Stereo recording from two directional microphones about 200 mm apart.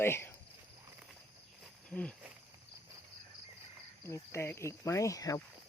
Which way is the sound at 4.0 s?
15° left (ahead or behind).